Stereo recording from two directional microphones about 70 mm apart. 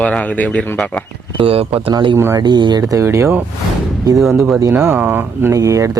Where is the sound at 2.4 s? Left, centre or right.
Right.